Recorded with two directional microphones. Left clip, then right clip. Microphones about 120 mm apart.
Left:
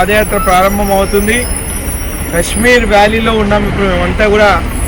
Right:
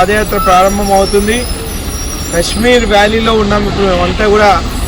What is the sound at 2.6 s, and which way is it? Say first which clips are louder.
Speech: left 1 dB; 15° right (ahead or behind).